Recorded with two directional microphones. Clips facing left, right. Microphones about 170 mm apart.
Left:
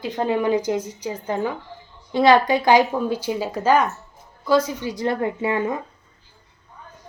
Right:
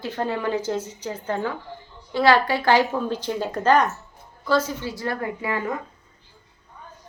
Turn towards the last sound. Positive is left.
turn(degrees=20)  # may be behind; listen again after turning